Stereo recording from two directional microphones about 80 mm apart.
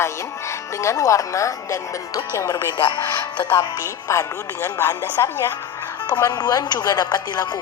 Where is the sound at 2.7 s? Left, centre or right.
Left.